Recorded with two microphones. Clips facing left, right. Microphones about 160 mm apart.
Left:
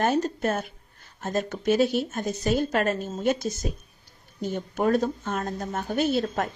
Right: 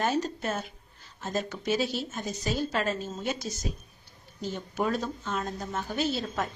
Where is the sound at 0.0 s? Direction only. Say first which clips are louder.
Left 5 dB; 50° left (ahead or behind).